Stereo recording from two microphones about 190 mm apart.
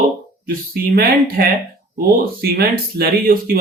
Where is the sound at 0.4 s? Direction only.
50° right (ahead or behind).